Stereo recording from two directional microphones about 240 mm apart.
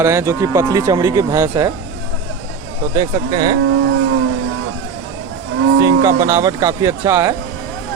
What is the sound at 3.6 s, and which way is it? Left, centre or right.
Vehicle, right.